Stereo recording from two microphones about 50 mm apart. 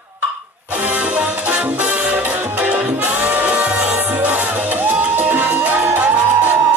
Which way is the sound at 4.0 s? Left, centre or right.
Right.